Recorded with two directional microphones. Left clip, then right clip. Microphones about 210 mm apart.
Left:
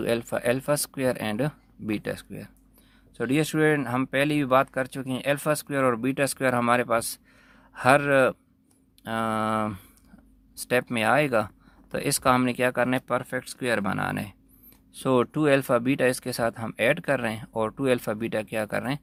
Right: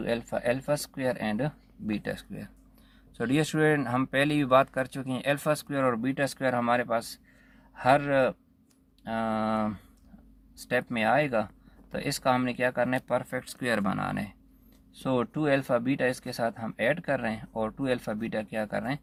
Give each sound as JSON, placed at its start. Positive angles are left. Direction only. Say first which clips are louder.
{"t": 0.0, "sound": "speech", "louder": "left 3 dB", "side_deg": 35}